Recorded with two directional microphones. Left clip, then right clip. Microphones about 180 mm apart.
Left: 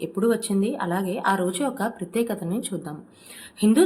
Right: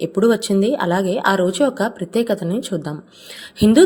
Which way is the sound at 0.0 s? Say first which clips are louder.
Right 7 dB; 40° right (ahead or behind).